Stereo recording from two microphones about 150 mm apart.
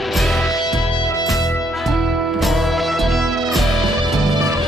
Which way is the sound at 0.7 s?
Centre (ahead or behind).